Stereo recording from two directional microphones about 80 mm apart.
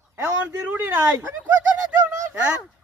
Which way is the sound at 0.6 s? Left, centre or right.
Right.